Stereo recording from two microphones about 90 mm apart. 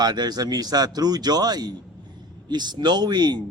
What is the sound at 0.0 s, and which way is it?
A man's voice, 50° right (ahead or behind).